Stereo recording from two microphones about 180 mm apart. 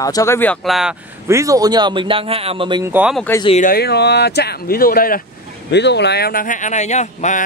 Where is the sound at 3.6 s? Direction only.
60° left (ahead or behind).